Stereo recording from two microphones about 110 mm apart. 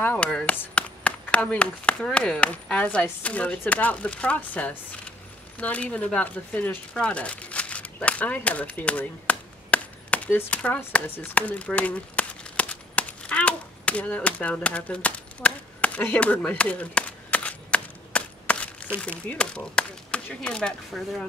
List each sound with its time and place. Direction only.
0.0 s speech: 15° left (ahead or behind)
5.6 s a sound: 10° left (ahead or behind)
18.9 s speech: 10° left (ahead or behind)